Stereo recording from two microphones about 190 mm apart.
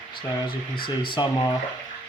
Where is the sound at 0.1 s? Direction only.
25° left (ahead or behind).